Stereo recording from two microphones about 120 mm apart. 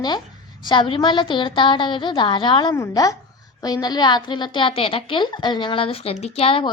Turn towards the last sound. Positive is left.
turn(degrees=50)  # may be behind; listen again after turning